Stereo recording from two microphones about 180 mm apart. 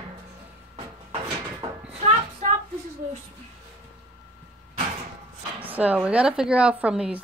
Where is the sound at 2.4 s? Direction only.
45° right (ahead or behind).